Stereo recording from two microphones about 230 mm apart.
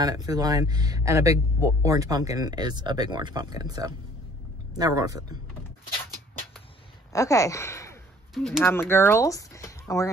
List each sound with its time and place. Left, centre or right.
0.0 s speech: centre
7.1 s speech: centre
8.4 s speech: centre